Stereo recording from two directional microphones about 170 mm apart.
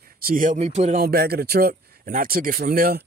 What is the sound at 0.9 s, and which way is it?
Speech, 65° right (ahead or behind).